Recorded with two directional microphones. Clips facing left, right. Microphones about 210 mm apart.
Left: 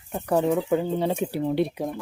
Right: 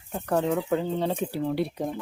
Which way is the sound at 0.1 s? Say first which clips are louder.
Left 3 dB; 10° left (ahead or behind).